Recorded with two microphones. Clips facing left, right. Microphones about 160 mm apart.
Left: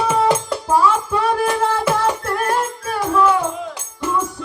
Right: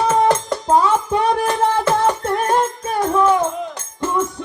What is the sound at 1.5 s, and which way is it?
Music, 10° left (ahead or behind).